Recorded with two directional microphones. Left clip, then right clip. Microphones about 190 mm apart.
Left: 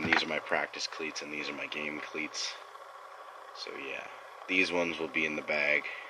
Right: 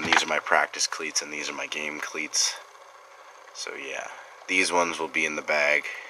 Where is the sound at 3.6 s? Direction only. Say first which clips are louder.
Right 6 dB; 15° right (ahead or behind).